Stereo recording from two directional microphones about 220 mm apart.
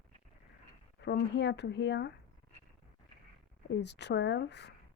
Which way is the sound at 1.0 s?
50° left (ahead or behind).